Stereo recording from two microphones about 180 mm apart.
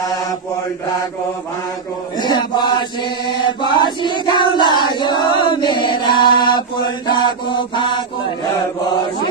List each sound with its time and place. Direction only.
2.1 s chant: 25° left (ahead or behind)